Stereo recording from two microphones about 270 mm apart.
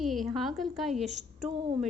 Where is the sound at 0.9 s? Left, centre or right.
Right.